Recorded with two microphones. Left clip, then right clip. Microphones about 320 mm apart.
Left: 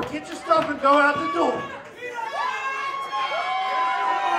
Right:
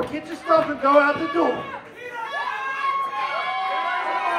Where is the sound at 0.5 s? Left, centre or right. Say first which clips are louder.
Right 1 dB; centre.